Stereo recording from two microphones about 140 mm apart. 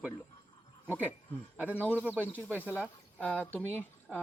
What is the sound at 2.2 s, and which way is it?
Speech, 10° left (ahead or behind).